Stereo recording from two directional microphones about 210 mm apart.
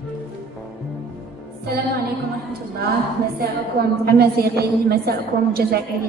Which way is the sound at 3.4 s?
50° right (ahead or behind).